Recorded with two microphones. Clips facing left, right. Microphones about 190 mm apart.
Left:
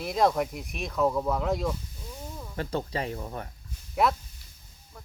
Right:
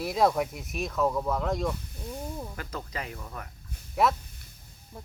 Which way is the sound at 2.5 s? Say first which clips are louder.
Left 6 dB; 30° left (ahead or behind).